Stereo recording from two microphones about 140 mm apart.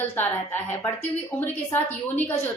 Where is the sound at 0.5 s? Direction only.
15° left (ahead or behind).